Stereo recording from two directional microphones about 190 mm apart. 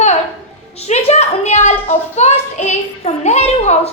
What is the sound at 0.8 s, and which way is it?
A child's voice, 35° left (ahead or behind).